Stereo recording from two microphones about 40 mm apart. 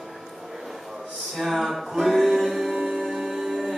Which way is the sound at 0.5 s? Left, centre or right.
Centre.